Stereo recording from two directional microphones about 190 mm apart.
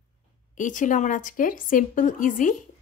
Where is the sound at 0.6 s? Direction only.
40° left (ahead or behind).